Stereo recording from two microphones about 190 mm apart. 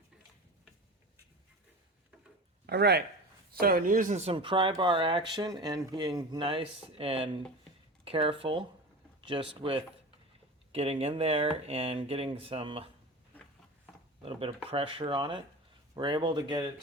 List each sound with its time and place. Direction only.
2.6 s speech: 60° right (ahead or behind); by 12.9 s 30° right (ahead or behind)
14.2 s speech: 30° right (ahead or behind)